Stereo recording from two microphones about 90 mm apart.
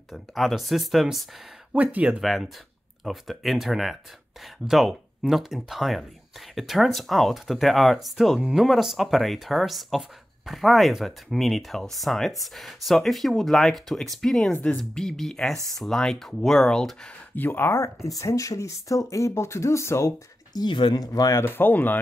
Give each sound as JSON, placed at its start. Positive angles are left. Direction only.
{"t": 0.1, "sound": "speech", "side_deg": 0}
{"t": 1.7, "sound": "speech", "side_deg": -15}
{"t": 2.2, "sound": "speech", "side_deg": 0}
{"t": 17.4, "sound": "speech", "side_deg": 25}
{"t": 20.5, "sound": "speech", "side_deg": 65}
{"t": 21.0, "sound": "speech", "side_deg": 45}
{"t": 21.4, "sound": "speech", "side_deg": 25}